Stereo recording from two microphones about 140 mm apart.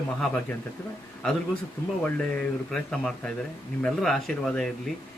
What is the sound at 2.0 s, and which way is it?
A man's voice, 10° left (ahead or behind).